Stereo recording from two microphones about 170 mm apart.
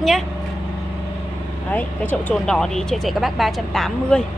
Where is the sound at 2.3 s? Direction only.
5° left (ahead or behind).